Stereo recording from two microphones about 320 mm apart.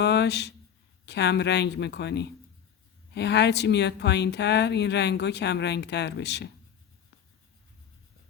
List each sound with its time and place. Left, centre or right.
0.0 s a woman's voice: left